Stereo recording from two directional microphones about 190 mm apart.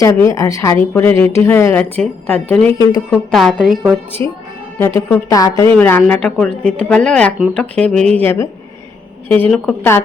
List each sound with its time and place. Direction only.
0.0 s speech: 15° left (ahead or behind); by 3.9 s 5° right (ahead or behind)
4.2 s speech: 10° left (ahead or behind)